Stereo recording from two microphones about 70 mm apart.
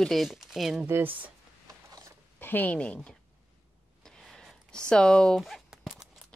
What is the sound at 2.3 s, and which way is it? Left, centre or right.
Speech, left.